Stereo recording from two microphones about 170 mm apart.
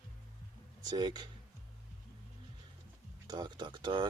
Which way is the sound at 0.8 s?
25° right (ahead or behind).